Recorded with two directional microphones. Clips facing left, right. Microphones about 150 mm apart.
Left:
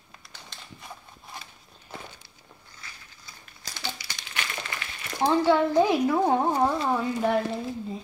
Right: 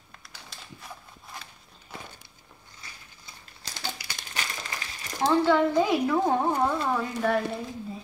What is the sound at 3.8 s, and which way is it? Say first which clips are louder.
Crumpling: even; 40° right (ahead or behind).